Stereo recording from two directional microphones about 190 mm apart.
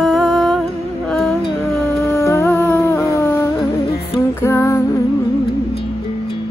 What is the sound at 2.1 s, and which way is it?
Humming, 15° left (ahead or behind).